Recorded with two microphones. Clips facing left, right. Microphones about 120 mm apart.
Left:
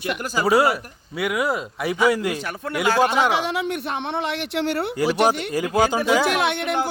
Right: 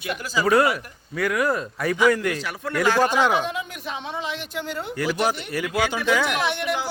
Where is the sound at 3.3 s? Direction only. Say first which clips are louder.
Left 2 dB; 80° left.